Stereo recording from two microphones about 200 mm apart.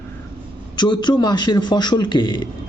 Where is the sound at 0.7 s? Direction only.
20° left (ahead or behind).